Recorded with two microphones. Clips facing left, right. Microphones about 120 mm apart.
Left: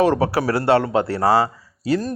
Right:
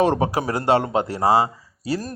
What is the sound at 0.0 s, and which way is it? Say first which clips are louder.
A man's voice: left 2 dB; 20° right (ahead or behind).